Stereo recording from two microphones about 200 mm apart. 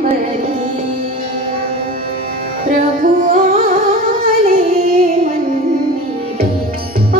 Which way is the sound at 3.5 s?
45° right (ahead or behind).